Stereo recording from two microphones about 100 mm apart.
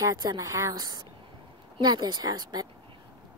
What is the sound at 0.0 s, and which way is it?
Speech, 40° right (ahead or behind).